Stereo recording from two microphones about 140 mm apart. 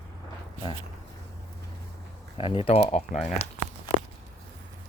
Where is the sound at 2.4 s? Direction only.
40° left (ahead or behind).